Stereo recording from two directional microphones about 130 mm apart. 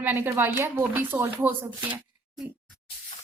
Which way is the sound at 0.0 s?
15° right (ahead or behind).